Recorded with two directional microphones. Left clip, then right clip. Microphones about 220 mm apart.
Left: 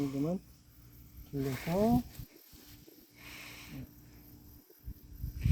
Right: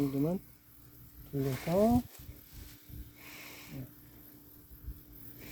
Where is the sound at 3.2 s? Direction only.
Centre (ahead or behind).